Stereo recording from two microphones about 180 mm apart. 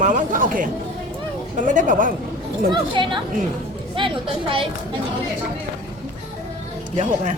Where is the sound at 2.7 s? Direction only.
25° right (ahead or behind).